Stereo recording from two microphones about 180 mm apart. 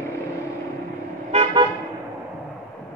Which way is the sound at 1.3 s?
25° right (ahead or behind).